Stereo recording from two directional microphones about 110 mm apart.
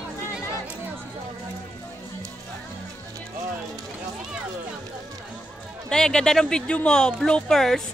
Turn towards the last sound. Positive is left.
turn(degrees=5)  # may be behind; listen again after turning